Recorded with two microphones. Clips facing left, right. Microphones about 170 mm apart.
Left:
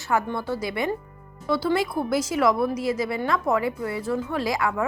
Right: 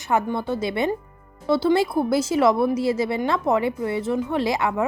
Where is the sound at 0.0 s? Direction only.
20° right (ahead or behind).